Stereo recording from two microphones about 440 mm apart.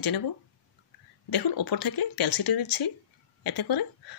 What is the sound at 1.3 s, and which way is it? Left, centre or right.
Speech, left.